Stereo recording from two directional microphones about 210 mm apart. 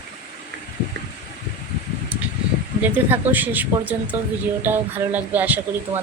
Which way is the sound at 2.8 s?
10° right (ahead or behind).